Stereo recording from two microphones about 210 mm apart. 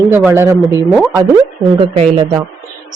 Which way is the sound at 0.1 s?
10° right (ahead or behind).